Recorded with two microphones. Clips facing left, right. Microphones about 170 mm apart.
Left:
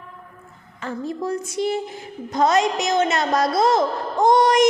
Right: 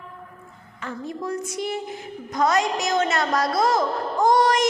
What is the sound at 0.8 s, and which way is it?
A woman's voice, 35° left (ahead or behind).